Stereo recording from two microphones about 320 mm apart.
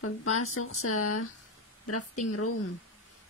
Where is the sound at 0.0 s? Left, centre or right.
Left.